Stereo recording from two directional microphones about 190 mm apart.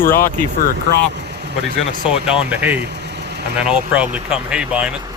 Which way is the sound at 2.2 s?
10° right (ahead or behind).